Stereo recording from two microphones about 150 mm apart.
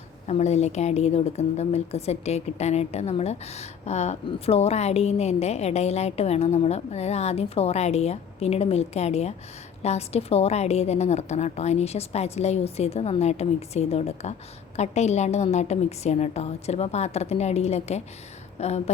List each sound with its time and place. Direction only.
0.3 s a woman's voice: 45° left (ahead or behind)